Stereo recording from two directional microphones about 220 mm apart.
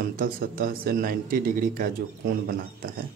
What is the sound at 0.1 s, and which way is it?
Speech, 40° right (ahead or behind).